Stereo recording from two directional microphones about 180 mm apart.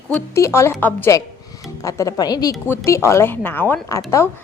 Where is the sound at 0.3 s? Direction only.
15° left (ahead or behind).